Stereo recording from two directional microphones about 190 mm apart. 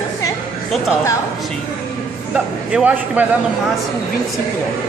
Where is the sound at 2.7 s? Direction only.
5° right (ahead or behind).